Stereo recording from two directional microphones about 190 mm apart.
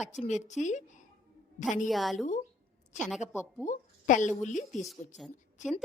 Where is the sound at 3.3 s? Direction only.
10° left (ahead or behind).